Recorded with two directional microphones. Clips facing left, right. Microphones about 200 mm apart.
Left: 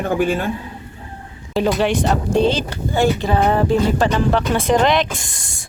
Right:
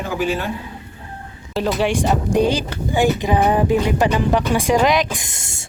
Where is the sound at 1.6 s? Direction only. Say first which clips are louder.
Left 2 dB; 5° right (ahead or behind); by 5.6 s 25° right (ahead or behind).